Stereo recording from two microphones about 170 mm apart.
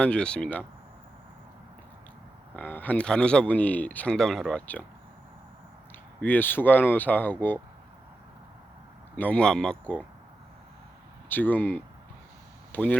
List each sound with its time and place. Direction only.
0.0 s speech: 5° left (ahead or behind)
2.6 s speech: 10° left (ahead or behind)
6.2 s speech: 10° left (ahead or behind)
9.1 s speech: 10° left (ahead or behind)
11.3 s speech: 10° left (ahead or behind)